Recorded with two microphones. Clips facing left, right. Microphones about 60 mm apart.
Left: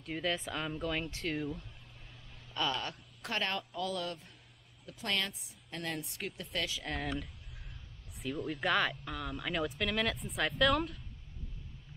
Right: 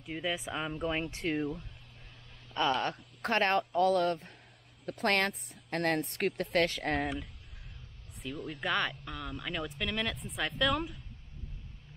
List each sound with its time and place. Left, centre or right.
0.0 s speech: centre; by 1.2 s right
2.5 s a woman's voice: right
4.8 s a woman's voice: right
8.5 s speech: centre